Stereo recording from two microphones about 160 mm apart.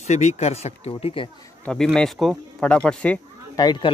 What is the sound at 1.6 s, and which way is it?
Speech, 5° left (ahead or behind).